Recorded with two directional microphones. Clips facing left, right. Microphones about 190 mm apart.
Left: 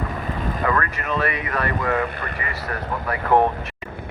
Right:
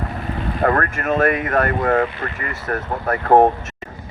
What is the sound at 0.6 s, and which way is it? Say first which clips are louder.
Speech: right 6 dB; 45° right (ahead or behind).